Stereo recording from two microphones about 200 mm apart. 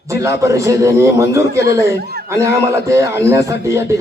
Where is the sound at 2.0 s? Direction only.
50° right (ahead or behind).